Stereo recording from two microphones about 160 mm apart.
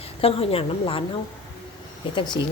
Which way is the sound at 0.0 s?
35° left (ahead or behind).